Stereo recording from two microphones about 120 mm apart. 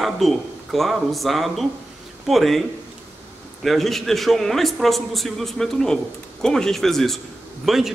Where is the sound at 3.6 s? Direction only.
Centre (ahead or behind).